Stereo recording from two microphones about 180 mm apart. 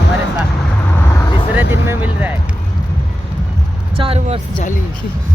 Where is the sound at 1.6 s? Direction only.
10° right (ahead or behind).